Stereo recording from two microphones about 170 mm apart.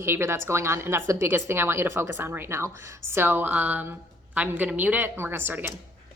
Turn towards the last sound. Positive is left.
turn(degrees=-10)  # may be behind; listen again after turning